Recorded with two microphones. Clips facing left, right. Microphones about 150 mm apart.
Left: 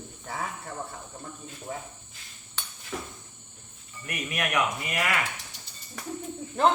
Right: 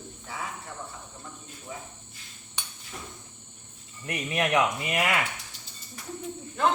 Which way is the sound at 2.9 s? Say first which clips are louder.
Left 6 dB; 90° left.